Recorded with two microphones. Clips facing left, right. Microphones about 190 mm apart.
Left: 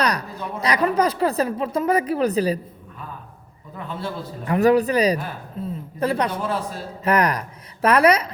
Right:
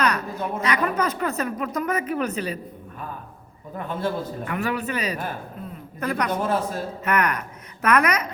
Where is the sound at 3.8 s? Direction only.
50° right (ahead or behind).